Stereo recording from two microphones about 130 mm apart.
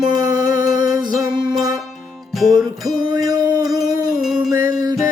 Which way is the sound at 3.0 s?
30° right (ahead or behind).